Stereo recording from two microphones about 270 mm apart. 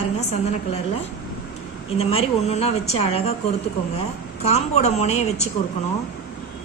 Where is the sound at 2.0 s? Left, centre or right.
Left.